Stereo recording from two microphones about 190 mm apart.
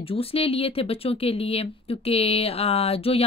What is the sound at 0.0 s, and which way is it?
Speech, 30° left (ahead or behind).